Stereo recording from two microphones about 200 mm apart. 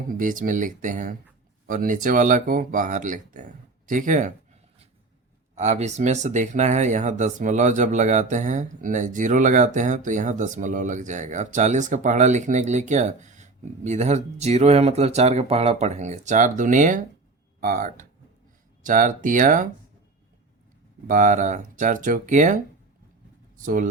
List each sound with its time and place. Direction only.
0.1 s speech: 40° right (ahead or behind)
5.5 s speech: 35° right (ahead or behind)
21.1 s speech: 40° right (ahead or behind)